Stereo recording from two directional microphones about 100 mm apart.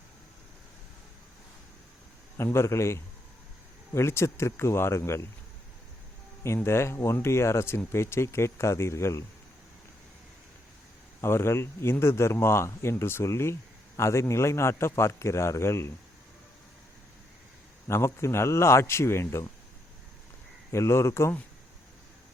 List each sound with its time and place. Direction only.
2.4 s speech: 25° left (ahead or behind)
6.4 s speech: 25° left (ahead or behind)
11.2 s speech: 25° left (ahead or behind)
17.8 s speech: 25° left (ahead or behind)
20.7 s speech: 30° left (ahead or behind)